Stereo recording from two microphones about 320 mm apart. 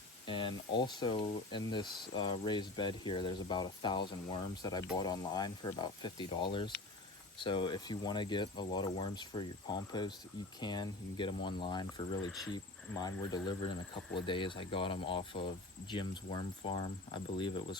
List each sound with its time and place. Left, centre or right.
0.3 s speech: centre